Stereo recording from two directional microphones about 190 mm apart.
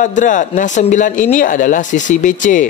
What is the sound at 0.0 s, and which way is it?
Speech, 40° left (ahead or behind).